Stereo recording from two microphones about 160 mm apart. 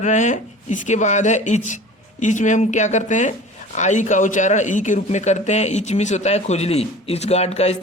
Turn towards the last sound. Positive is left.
turn(degrees=40)  # may be behind; listen again after turning